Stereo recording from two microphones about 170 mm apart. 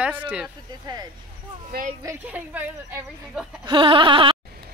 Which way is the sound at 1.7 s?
65° right (ahead or behind).